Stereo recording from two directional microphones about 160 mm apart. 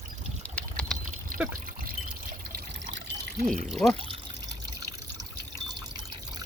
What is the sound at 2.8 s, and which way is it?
Water, 80° right.